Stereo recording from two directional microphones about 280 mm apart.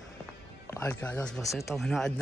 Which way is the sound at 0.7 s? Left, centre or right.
Centre.